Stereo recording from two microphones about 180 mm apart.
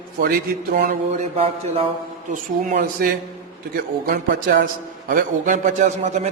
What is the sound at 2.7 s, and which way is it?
A man's voice, 55° right (ahead or behind).